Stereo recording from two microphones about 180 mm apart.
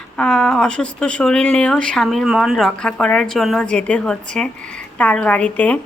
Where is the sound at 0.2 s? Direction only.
5° left (ahead or behind).